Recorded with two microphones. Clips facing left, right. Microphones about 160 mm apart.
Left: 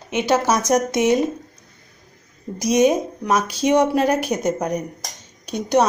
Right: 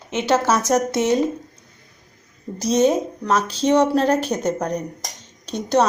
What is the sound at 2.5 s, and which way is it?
Speech, 15° left (ahead or behind).